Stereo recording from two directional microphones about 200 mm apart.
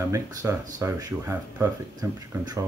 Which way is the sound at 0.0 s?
15° right (ahead or behind).